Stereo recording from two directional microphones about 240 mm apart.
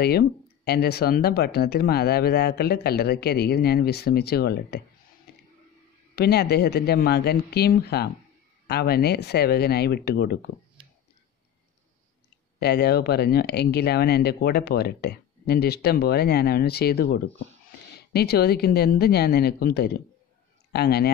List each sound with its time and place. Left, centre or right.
0.0 s speech: left
5.3 s a sound: left
6.1 s speech: left
12.5 s speech: left